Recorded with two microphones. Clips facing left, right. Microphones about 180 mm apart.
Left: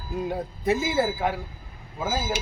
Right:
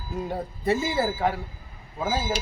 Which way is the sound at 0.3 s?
Centre (ahead or behind).